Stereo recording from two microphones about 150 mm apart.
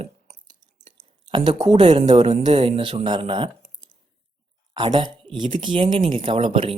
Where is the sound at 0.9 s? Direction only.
35° right (ahead or behind).